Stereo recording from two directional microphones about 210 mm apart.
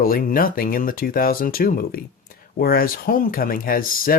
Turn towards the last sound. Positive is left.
turn(degrees=45)  # may be behind; listen again after turning